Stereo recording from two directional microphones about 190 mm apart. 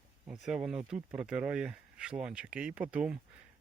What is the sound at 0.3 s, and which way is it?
Speech, 5° right (ahead or behind).